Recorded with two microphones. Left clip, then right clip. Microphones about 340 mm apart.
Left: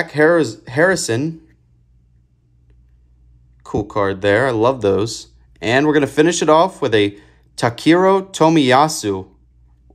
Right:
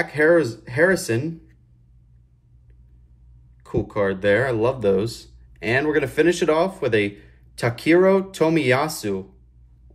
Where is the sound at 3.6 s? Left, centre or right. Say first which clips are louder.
Left 4 dB; centre.